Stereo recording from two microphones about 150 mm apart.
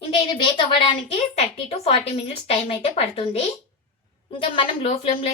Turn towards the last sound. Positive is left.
turn(degrees=40)  # may be behind; listen again after turning